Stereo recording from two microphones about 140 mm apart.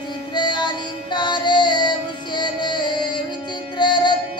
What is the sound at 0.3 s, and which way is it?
Music, 30° left (ahead or behind).